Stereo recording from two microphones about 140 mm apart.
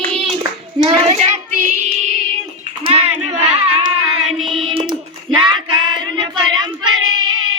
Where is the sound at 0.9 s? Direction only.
55° right (ahead or behind).